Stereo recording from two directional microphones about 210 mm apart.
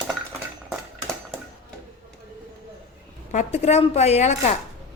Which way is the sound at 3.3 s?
30° left (ahead or behind).